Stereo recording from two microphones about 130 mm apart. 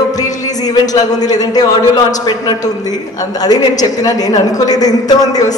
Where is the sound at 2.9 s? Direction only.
30° left (ahead or behind).